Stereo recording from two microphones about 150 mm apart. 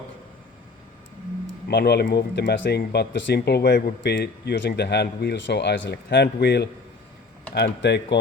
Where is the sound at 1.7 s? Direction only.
90° left.